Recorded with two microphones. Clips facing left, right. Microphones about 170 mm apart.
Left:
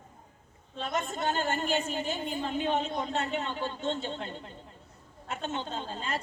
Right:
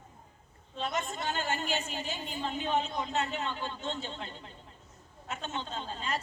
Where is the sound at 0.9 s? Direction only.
50° left (ahead or behind).